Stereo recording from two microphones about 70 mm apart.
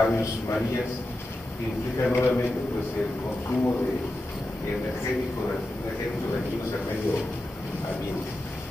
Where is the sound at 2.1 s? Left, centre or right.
Left.